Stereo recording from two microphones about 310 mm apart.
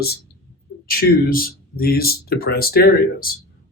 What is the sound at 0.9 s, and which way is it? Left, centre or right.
Speech, left.